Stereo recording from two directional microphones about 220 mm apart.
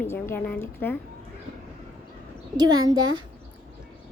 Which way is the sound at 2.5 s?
20° right (ahead or behind).